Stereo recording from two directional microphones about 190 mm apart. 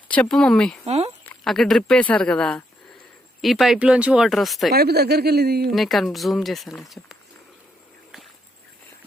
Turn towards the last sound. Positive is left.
turn(degrees=0)  # may be behind; listen again after turning